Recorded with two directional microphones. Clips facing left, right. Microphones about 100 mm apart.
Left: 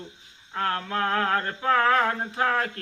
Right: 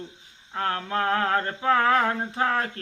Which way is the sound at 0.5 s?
30° right (ahead or behind).